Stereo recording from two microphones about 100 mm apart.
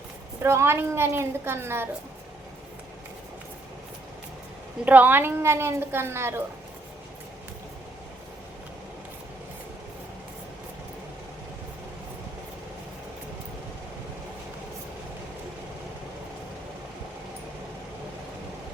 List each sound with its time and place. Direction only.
0.4 s a woman's voice: 25° right (ahead or behind)
4.9 s a woman's voice: 15° right (ahead or behind)